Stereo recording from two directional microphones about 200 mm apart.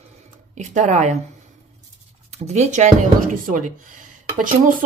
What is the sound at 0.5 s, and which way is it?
Speech, 35° right (ahead or behind).